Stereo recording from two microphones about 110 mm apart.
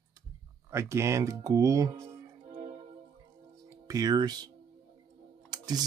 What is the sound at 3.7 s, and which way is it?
Speech, 30° right (ahead or behind).